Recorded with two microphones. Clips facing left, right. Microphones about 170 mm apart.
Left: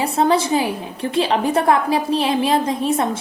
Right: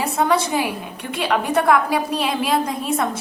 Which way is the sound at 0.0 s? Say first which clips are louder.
Left 2 dB; 25° left (ahead or behind).